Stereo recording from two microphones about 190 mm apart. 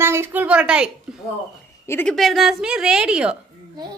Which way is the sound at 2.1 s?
Centre (ahead or behind).